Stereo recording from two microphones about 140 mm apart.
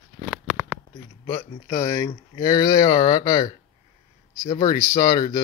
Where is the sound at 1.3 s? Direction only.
20° left (ahead or behind).